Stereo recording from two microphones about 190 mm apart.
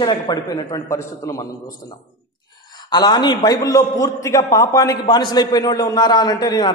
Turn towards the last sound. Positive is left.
turn(degrees=20)  # may be behind; listen again after turning